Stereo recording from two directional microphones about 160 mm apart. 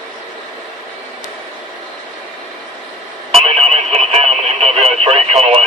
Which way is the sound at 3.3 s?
40° right (ahead or behind).